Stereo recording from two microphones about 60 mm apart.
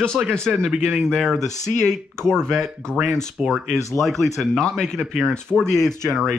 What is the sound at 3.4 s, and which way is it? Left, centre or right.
Speech, centre.